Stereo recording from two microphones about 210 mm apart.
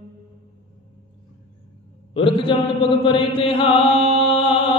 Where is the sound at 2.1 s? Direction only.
25° left (ahead or behind).